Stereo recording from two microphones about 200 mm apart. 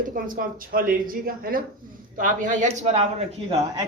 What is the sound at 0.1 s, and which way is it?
Speech, 45° right (ahead or behind).